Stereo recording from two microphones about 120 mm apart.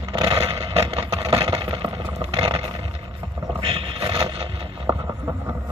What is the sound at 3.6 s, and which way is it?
Vehicle, 55° right (ahead or behind).